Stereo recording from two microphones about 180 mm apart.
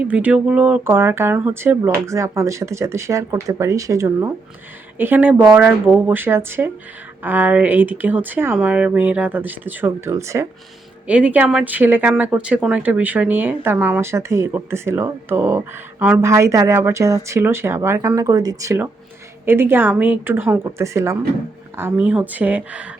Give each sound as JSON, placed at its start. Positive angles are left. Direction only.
{"t": 0.0, "sound": "speech", "side_deg": -10}